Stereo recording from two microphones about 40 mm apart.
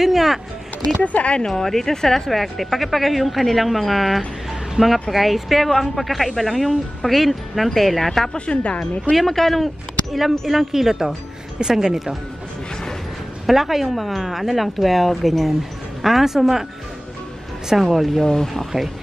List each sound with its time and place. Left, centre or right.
0.0 s speech: centre
1.0 s speech: left
1.5 s speech: centre
4.8 s speech: centre
5.1 s speech: centre
8.3 s speech: left
9.1 s speech: centre
13.5 s speech: centre
17.9 s speech: centre
18.2 s speech: centre